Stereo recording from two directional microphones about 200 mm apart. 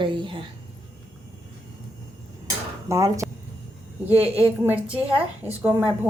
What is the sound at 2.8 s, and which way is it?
A woman's voice, 15° right (ahead or behind).